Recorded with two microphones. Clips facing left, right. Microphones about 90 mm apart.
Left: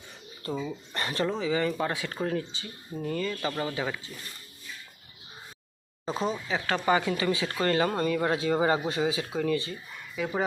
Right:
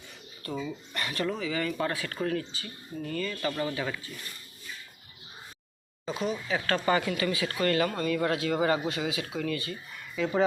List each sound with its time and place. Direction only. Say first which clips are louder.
0.5 s speech: left 1 dB; 15° left (ahead or behind)
0.9 s speech: left 2 dB; 30° left (ahead or behind)
6.1 s speech: left 1 dB; 35° left (ahead or behind)
6.5 s speech: left 1 dB; 15° left (ahead or behind)
10.2 s speech: right 2 dB; 10° left (ahead or behind)